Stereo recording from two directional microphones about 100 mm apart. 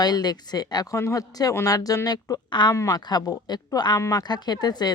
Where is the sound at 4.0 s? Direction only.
30° left (ahead or behind).